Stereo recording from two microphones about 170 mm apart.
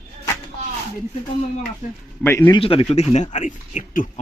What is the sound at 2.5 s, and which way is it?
Speech, 30° left (ahead or behind).